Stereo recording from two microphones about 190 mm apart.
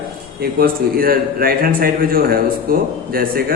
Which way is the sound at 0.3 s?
50° right (ahead or behind).